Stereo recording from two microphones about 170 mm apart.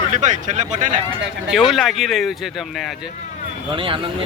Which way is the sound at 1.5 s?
Centre (ahead or behind).